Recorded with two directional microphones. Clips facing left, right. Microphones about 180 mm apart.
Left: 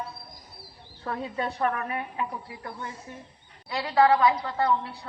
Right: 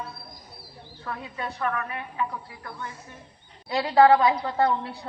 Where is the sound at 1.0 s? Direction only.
30° left (ahead or behind).